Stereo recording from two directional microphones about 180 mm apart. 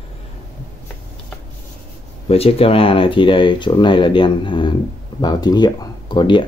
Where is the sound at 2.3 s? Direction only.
35° left (ahead or behind).